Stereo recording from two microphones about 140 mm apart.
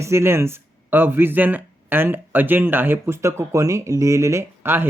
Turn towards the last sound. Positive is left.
turn(degrees=-15)  # may be behind; listen again after turning